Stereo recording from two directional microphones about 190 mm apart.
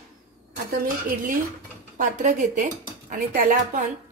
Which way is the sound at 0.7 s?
50° right (ahead or behind).